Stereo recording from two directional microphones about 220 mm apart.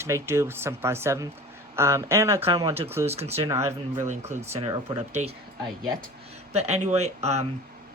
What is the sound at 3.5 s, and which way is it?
Speech, 15° right (ahead or behind).